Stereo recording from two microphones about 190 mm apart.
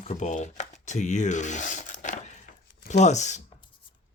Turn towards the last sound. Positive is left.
turn(degrees=40)  # may be behind; listen again after turning